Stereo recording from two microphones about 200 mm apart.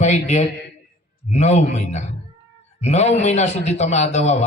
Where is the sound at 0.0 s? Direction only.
35° left (ahead or behind).